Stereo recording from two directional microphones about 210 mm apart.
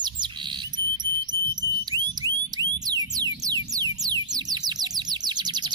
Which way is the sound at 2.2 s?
20° right (ahead or behind).